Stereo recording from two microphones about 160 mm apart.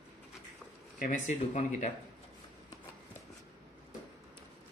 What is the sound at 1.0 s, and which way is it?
Speech, 50° left (ahead or behind).